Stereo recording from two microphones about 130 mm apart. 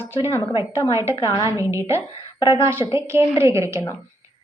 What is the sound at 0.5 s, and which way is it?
Speech, 20° right (ahead or behind).